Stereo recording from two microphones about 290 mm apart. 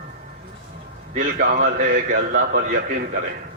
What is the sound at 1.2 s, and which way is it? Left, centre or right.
A man's voice, right.